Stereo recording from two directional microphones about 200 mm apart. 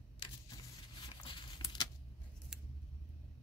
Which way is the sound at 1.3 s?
20° left (ahead or behind).